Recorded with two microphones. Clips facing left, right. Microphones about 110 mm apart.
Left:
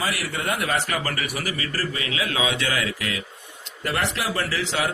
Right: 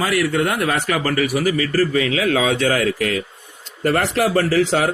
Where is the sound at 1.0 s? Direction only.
40° right (ahead or behind).